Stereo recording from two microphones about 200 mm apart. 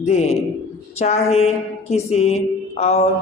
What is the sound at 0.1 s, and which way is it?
A woman's voice, 30° left (ahead or behind).